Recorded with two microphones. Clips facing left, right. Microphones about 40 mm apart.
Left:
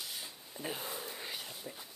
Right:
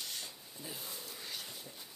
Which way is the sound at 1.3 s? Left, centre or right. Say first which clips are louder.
Left 1 dB; centre.